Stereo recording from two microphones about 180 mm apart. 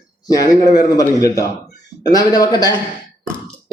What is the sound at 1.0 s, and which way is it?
A man's voice, 15° left (ahead or behind).